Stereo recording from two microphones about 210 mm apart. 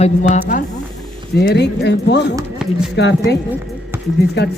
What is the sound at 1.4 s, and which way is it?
Speech, 55° left (ahead or behind).